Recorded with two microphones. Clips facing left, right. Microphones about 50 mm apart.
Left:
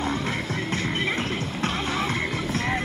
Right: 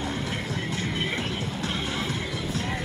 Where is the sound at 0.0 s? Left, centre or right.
Left.